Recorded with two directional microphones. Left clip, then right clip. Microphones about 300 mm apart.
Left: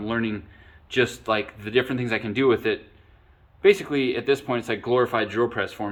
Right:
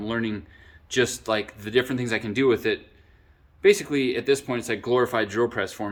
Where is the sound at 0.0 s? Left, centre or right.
Centre.